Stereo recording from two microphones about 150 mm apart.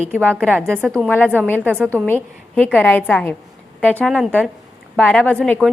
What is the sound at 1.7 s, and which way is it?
Speech, 15° right (ahead or behind).